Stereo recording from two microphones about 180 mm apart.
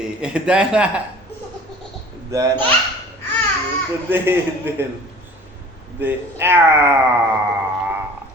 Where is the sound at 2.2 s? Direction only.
15° right (ahead or behind).